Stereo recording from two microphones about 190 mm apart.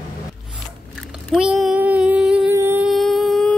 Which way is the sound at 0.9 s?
Centre (ahead or behind).